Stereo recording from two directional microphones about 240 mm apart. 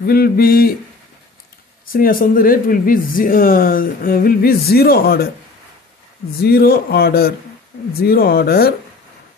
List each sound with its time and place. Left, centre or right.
0.0 s speech: left
1.9 s speech: left
6.4 s speech: left